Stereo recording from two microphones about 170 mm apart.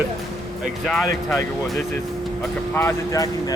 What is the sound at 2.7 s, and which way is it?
Speech, 15° left (ahead or behind).